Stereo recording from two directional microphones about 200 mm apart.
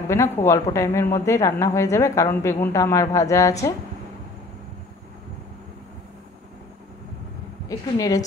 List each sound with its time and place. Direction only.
0.1 s a woman's voice: 15° left (ahead or behind)
7.6 s a woman's voice: 15° left (ahead or behind)